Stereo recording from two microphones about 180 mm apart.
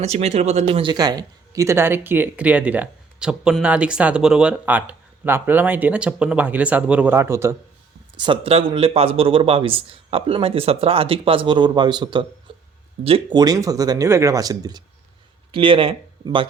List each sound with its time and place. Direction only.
0.0 s speech: 35° right (ahead or behind); by 7.5 s 15° right (ahead or behind)
8.1 s speech: 25° right (ahead or behind)